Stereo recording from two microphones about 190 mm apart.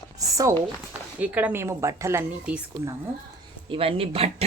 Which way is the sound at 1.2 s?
10° right (ahead or behind).